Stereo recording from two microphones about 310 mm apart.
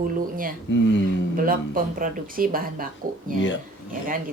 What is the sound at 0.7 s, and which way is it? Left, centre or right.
Speech, left.